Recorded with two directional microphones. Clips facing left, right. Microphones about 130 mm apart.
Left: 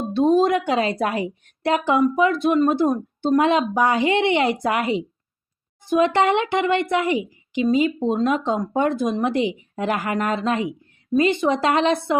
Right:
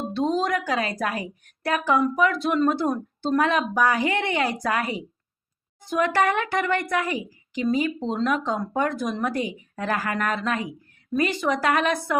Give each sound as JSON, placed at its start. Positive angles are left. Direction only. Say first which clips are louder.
{"t": 0.1, "sound": "a woman's voice", "louder": "left 8 dB", "side_deg": 20}